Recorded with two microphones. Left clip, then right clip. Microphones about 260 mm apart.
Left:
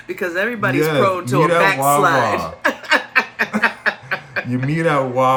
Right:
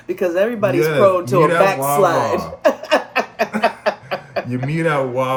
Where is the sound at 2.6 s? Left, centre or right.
Centre.